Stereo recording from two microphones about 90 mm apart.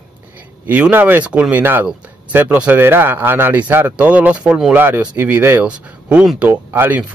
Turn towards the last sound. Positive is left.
turn(degrees=-20)  # may be behind; listen again after turning